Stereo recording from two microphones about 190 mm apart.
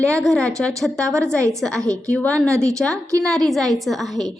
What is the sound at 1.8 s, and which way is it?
Speech, 20° right (ahead or behind).